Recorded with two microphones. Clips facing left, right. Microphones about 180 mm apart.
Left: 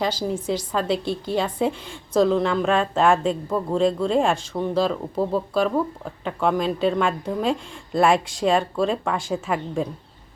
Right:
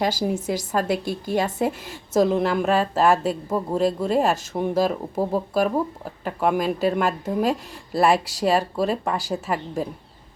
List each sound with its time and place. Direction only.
0.0 s a woman's voice: 10° right (ahead or behind)